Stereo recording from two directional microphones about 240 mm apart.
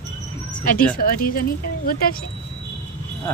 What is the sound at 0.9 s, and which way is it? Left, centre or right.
Speech, left.